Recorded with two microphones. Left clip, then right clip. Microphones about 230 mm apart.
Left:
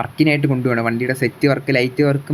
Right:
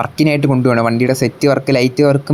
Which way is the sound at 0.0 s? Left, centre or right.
Centre.